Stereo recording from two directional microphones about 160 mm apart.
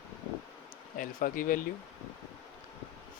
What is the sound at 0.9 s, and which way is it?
Speech, 60° left (ahead or behind).